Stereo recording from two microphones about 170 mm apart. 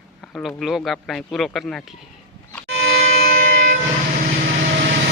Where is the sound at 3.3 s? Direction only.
55° right (ahead or behind).